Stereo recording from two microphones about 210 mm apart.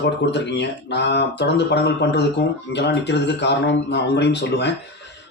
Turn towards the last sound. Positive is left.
turn(degrees=55)  # may be behind; listen again after turning